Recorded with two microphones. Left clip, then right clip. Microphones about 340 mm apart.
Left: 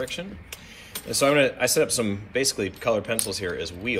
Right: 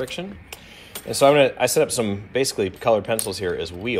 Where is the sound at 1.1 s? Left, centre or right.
Centre.